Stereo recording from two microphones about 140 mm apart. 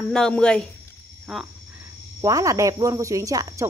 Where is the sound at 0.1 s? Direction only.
5° left (ahead or behind).